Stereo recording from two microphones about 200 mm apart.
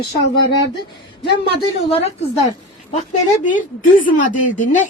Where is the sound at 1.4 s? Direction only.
30° left (ahead or behind).